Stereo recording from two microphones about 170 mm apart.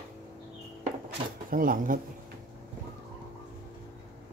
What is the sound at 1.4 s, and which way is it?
Speech, 55° right (ahead or behind).